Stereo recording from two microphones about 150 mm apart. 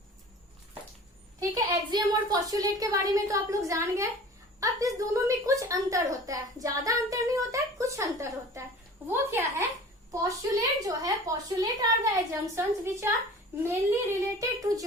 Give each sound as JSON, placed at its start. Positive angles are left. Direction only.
{"t": 1.4, "sound": "a woman's voice", "side_deg": -25}